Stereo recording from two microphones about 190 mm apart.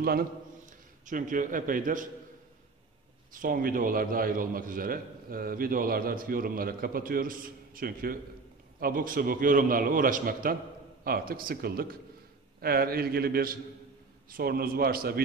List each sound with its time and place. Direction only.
1.0 s a man's voice: 45° right (ahead or behind)
3.3 s a man's voice: 45° right (ahead or behind)